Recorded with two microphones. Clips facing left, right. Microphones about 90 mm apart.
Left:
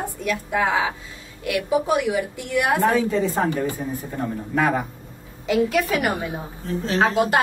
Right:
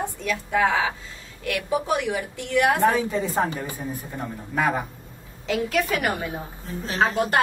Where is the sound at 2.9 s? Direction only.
15° right (ahead or behind).